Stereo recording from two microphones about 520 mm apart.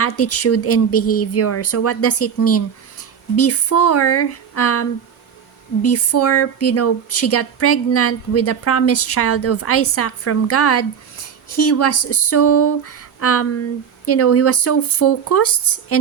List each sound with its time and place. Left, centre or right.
0.0 s speech: left